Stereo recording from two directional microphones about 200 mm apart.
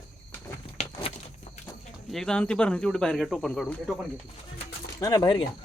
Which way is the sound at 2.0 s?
Centre (ahead or behind).